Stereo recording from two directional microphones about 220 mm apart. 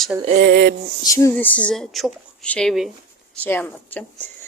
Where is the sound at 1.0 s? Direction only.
15° left (ahead or behind).